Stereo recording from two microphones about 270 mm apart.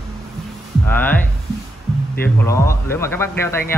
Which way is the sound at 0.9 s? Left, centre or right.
Centre.